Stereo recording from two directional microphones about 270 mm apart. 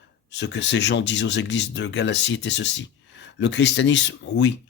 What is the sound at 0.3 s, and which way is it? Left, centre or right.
Speech, left.